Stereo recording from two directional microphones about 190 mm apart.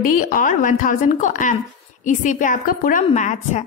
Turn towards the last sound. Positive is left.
turn(degrees=40)  # may be behind; listen again after turning